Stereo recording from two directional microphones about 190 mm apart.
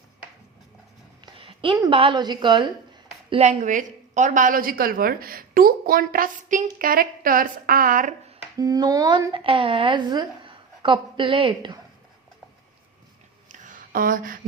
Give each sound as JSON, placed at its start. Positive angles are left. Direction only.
{"t": 1.2, "sound": "a woman's voice", "side_deg": -25}
{"t": 8.5, "sound": "a woman's voice", "side_deg": -20}
{"t": 13.5, "sound": "a sound", "side_deg": -45}